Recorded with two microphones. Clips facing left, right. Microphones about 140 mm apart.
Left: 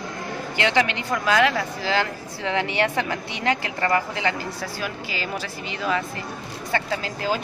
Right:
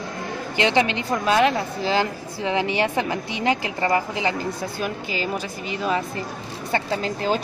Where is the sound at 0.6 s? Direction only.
20° right (ahead or behind).